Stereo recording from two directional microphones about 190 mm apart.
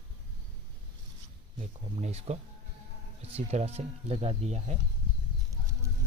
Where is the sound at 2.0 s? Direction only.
35° right (ahead or behind).